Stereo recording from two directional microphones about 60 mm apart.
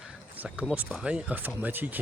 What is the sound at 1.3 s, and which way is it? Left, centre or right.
Speech, right.